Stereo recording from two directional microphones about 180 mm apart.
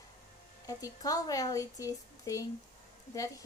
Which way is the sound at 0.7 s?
20° left (ahead or behind).